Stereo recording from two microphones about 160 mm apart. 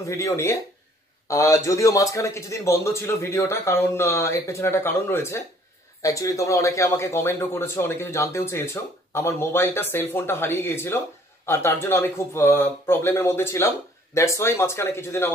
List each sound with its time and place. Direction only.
0.0 s a man's voice: 20° left (ahead or behind)